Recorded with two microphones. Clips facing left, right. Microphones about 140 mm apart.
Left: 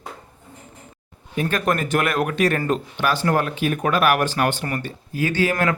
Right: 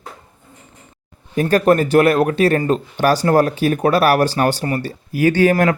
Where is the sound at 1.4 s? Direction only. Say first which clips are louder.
Right 8 dB; 35° right (ahead or behind).